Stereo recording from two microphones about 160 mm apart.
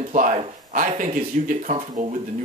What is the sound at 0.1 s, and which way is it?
Speech, 55° right (ahead or behind).